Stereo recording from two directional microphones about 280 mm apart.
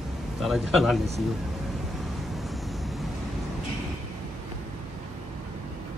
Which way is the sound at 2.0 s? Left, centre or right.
Centre.